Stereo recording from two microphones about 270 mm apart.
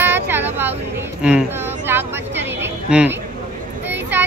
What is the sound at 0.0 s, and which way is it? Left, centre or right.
Vehicle, centre.